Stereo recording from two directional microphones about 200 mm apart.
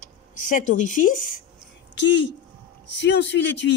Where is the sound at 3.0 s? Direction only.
60° left (ahead or behind).